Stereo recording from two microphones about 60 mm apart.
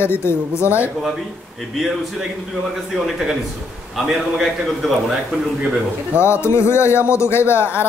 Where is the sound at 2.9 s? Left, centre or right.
Centre.